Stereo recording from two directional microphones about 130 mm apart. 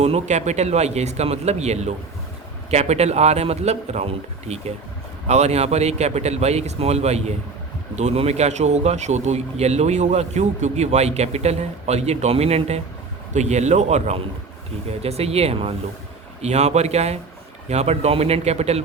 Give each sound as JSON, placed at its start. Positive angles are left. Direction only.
{"t": 0.0, "sound": "speech", "side_deg": -60}